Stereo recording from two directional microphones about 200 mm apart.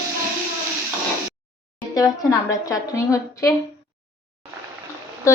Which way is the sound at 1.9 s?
15° left (ahead or behind).